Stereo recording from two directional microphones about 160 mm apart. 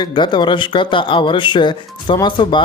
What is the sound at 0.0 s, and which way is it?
Speech, 30° left (ahead or behind).